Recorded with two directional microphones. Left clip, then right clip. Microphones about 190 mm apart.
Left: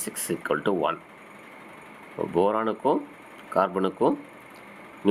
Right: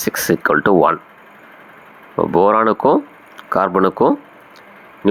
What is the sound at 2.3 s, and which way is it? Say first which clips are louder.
Speech: right 11 dB; 30° right (ahead or behind).